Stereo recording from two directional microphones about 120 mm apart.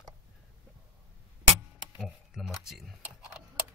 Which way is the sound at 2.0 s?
Centre (ahead or behind).